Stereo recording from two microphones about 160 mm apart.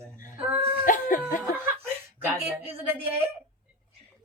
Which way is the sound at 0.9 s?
55° left (ahead or behind).